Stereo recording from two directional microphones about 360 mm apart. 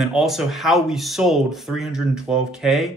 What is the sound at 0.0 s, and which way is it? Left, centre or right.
Speech, centre.